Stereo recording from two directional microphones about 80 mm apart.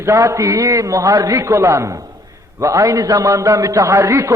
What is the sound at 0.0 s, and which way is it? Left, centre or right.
A man's voice, right.